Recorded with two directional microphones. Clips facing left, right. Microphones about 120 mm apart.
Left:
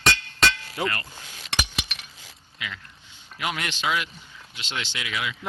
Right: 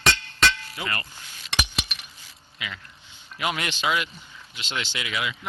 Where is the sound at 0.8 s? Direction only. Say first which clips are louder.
Left 5 dB; 40° left (ahead or behind).